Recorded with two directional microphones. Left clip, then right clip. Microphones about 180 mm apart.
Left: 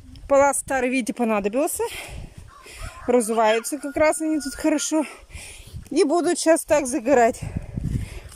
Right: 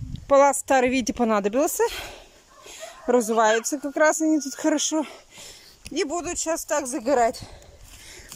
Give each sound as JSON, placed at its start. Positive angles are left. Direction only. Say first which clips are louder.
{"t": 0.3, "sound": "speech", "louder": "right 1 dB", "side_deg": 5}
{"t": 5.9, "sound": "speech", "louder": "left 7 dB", "side_deg": 25}
{"t": 6.8, "sound": "speech", "louder": "left 3 dB", "side_deg": 15}